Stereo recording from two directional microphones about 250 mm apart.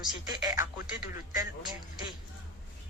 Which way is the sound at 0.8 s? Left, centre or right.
Left.